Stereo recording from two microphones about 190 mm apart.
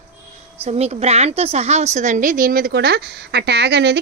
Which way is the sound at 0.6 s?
35° right (ahead or behind).